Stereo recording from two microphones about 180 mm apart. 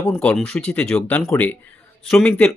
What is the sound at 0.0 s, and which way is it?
Speech, 10° left (ahead or behind).